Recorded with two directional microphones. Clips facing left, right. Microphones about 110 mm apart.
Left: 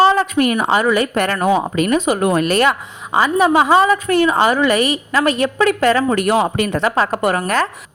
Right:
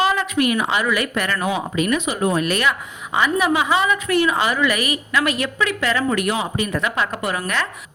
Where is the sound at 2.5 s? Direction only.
40° left (ahead or behind).